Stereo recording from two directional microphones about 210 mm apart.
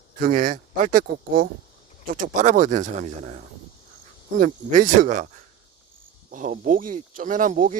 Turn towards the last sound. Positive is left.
turn(degrees=-40)  # may be behind; listen again after turning